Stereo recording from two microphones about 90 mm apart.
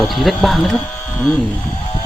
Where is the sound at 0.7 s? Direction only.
15° left (ahead or behind).